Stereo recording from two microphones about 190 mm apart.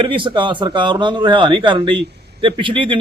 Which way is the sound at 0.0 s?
25° right (ahead or behind).